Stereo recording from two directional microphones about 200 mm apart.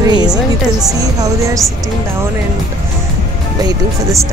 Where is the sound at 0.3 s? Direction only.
Centre (ahead or behind).